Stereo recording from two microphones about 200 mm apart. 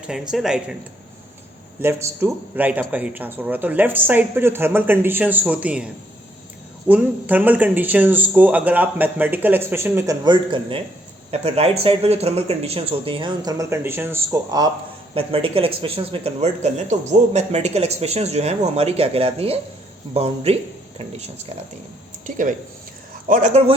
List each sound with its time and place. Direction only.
0.1 s speech: 5° right (ahead or behind)
1.8 s a man's voice: 10° right (ahead or behind)
15.1 s a man's voice: 25° right (ahead or behind)
22.3 s a man's voice: 40° right (ahead or behind)